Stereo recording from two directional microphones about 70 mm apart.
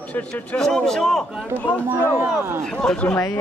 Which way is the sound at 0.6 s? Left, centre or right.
Centre.